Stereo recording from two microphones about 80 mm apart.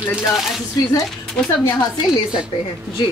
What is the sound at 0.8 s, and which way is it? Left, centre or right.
Speech, left.